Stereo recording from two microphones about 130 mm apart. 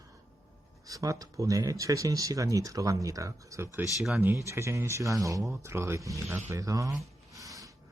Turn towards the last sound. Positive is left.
turn(degrees=-25)  # may be behind; listen again after turning